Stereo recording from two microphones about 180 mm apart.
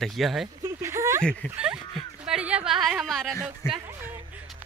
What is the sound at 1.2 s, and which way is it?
Speech, 5° left (ahead or behind).